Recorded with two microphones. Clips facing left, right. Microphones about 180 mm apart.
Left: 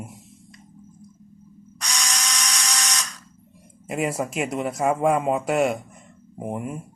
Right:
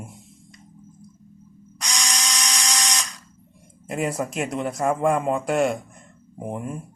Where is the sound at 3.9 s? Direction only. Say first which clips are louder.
Even; 5° left (ahead or behind).